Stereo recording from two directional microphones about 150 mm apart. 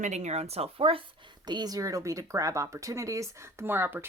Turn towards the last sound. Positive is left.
turn(degrees=-15)  # may be behind; listen again after turning